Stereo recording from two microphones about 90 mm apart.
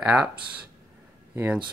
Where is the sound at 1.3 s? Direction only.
20° right (ahead or behind).